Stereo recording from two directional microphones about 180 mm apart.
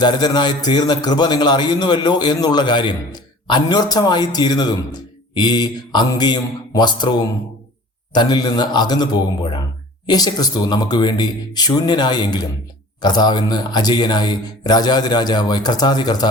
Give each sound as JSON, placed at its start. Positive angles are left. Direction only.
{"t": 0.0, "sound": "a man's voice", "side_deg": 25}